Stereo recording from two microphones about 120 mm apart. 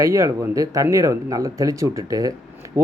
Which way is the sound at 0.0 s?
25° right (ahead or behind).